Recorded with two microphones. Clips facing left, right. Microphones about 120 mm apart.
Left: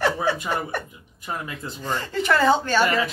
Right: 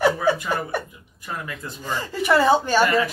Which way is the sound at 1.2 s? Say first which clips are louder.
Left 1 dB; 20° left (ahead or behind).